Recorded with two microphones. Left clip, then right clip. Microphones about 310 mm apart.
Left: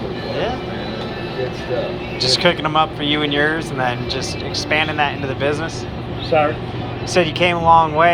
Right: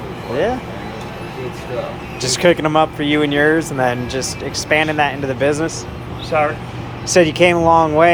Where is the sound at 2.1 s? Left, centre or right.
Right.